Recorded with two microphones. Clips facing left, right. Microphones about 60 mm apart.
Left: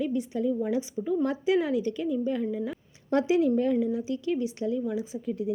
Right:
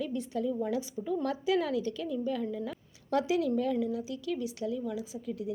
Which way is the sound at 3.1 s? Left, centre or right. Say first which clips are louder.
Left 5 dB; left.